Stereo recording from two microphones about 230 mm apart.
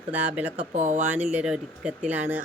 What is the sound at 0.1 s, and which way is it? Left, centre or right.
Speech, centre.